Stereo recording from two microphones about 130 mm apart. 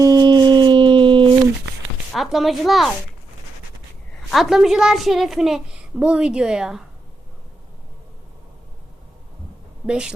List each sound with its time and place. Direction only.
0.0 s a sound: 30° right (ahead or behind)
2.1 s a woman's voice: centre (ahead or behind)
4.3 s a woman's voice: centre (ahead or behind)
9.8 s speech: 5° right (ahead or behind)